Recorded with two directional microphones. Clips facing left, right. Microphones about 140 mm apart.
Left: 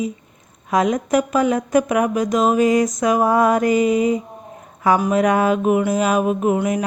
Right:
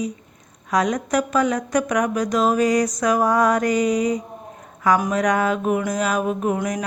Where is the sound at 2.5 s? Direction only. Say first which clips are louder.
Left 3 dB; 25° left (ahead or behind).